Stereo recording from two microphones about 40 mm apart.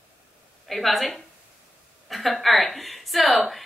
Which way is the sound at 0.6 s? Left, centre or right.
Centre.